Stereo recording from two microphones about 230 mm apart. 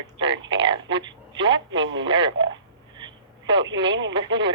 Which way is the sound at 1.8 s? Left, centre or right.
Right.